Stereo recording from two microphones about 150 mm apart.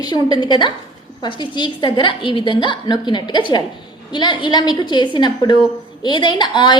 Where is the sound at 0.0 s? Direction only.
30° left (ahead or behind).